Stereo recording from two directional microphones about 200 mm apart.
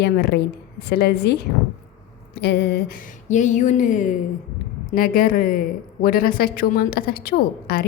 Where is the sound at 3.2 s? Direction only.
40° left (ahead or behind).